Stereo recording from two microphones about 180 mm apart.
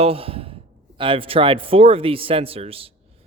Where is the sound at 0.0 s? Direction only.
30° right (ahead or behind).